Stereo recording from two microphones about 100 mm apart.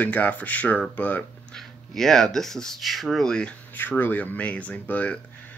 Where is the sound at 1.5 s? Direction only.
5° left (ahead or behind).